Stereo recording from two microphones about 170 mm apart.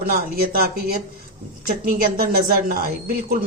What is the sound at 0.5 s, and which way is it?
Speech, 60° right (ahead or behind).